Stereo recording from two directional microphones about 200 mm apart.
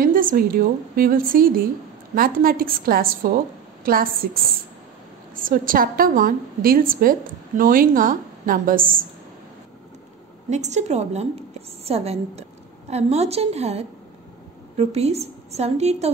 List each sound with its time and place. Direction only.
0.0 s a woman's voice: 45° right (ahead or behind)
10.5 s a woman's voice: 35° right (ahead or behind)